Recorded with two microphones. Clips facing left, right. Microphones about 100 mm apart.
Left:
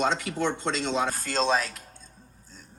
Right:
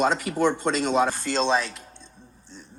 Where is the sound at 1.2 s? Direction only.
40° left (ahead or behind).